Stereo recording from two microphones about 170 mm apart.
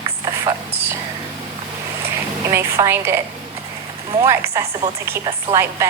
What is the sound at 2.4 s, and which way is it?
Speech, 15° right (ahead or behind).